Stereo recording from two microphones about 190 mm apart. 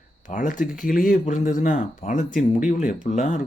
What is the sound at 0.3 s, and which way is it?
Speech, 40° left (ahead or behind).